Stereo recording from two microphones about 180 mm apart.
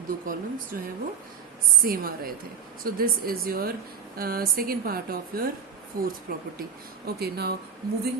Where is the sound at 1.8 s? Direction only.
55° right (ahead or behind).